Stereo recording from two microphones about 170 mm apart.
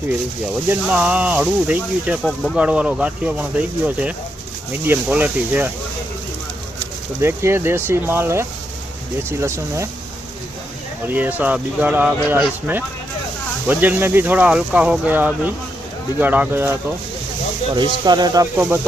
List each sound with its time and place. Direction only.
0.7 s speech: 10° right (ahead or behind)
2.2 s speech: centre (ahead or behind)
7.2 s speech: 15° right (ahead or behind)
11.0 s speech: 10° right (ahead or behind)
17.7 s speech: 25° right (ahead or behind)
18.5 s speech: 15° right (ahead or behind)